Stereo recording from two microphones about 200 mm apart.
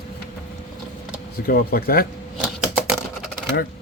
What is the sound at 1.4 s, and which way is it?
Speech, 50° left (ahead or behind).